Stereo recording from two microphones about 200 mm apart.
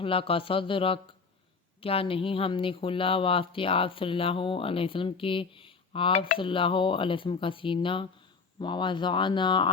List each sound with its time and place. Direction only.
0.0 s speech: 25° left (ahead or behind)